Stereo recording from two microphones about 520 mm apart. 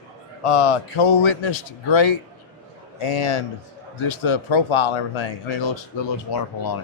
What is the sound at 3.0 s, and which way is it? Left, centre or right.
Speech, left.